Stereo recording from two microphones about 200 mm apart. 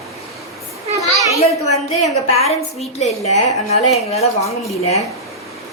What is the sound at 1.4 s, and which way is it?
A woman's voice, 30° left (ahead or behind).